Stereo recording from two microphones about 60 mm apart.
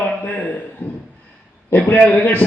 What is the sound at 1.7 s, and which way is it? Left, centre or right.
Speech, left.